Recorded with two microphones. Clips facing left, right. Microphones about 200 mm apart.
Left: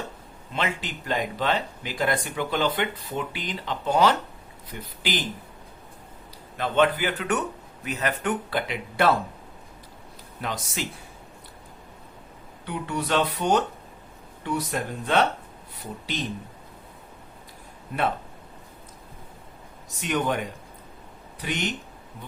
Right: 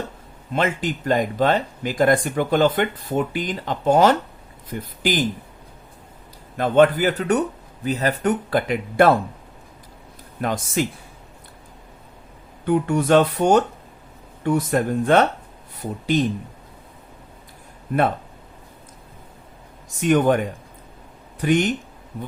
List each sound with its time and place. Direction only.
0.5 s speech: 45° right (ahead or behind)
6.6 s speech: 45° right (ahead or behind)
10.4 s speech: 50° right (ahead or behind)
12.6 s speech: 50° right (ahead or behind)
20.0 s speech: 50° right (ahead or behind)
21.4 s speech: 50° right (ahead or behind)